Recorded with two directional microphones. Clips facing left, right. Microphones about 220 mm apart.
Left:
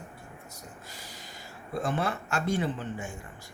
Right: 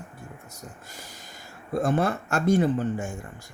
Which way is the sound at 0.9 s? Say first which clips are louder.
Right 1 dB; 45° right (ahead or behind).